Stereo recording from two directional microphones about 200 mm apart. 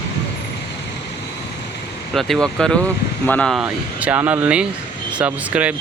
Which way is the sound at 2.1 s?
Centre (ahead or behind).